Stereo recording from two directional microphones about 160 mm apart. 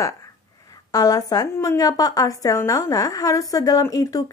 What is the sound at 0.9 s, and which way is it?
A woman's voice, 25° left (ahead or behind).